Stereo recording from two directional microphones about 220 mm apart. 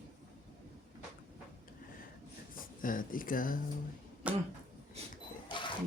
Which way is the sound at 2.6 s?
40° left (ahead or behind).